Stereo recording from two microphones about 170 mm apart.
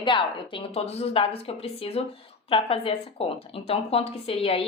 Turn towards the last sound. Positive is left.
turn(degrees=35)  # may be behind; listen again after turning